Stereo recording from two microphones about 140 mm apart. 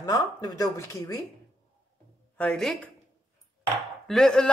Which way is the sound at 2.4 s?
5° left (ahead or behind).